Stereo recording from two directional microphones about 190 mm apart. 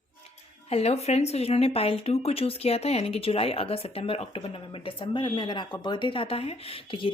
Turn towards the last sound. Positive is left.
turn(degrees=25)  # may be behind; listen again after turning